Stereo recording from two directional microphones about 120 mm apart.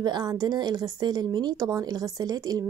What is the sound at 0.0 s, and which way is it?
Speech, 35° right (ahead or behind).